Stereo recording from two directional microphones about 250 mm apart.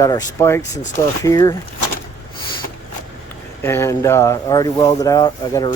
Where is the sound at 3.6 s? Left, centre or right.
Centre.